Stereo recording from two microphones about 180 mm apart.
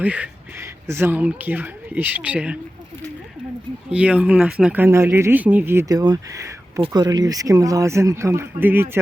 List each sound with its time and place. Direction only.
0.0 s speech: 10° right (ahead or behind)
3.9 s speech: 5° right (ahead or behind)